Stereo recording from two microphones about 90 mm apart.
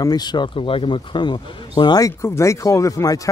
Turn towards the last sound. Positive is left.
turn(degrees=40)  # may be behind; listen again after turning